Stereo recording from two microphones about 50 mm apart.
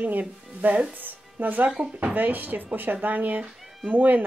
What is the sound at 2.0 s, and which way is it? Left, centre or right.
A woman's voice, right.